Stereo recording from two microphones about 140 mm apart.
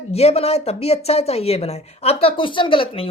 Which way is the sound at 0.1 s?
50° left (ahead or behind).